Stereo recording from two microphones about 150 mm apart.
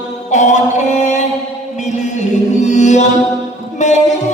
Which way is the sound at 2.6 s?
50° left (ahead or behind).